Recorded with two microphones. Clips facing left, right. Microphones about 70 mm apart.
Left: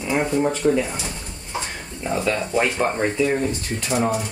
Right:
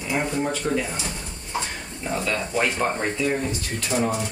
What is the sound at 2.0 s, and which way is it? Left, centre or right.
Speech, centre.